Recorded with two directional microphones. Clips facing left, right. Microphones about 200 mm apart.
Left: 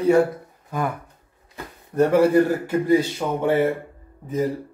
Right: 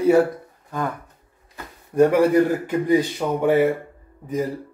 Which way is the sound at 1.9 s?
15° right (ahead or behind).